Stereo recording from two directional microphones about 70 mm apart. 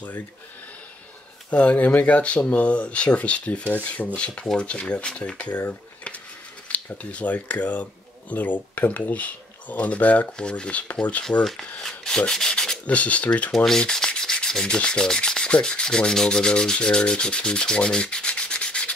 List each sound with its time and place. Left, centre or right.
1.5 s speech: centre
11.8 s rub: centre
13.7 s rub: centre